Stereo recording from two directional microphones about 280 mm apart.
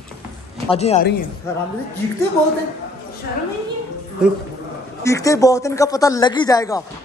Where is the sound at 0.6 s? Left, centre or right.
Left.